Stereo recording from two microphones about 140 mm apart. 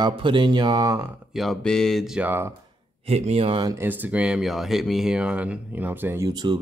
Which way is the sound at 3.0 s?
50° right (ahead or behind).